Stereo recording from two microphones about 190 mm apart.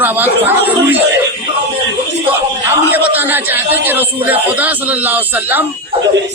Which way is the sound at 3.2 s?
10° right (ahead or behind).